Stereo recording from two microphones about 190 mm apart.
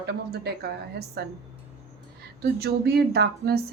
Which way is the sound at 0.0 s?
60° right (ahead or behind).